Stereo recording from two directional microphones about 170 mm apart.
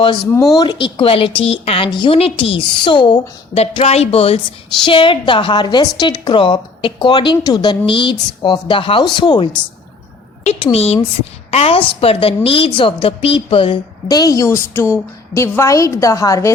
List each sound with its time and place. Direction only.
0.5 s a woman's voice: 25° left (ahead or behind)
10.4 s a woman's voice: 40° left (ahead or behind); by 16.5 s 20° left (ahead or behind)